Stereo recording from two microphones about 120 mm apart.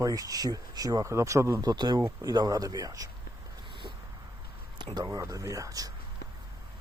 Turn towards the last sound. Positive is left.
turn(degrees=-30)  # may be behind; listen again after turning